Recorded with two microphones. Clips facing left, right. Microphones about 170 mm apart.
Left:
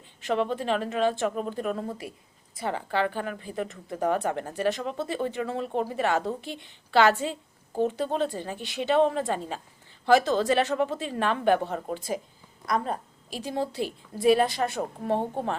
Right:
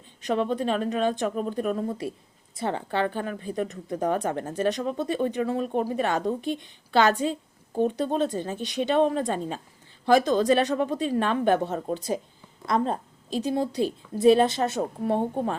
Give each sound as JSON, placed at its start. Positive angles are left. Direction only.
{"t": 0.2, "sound": "a woman's voice", "side_deg": -20}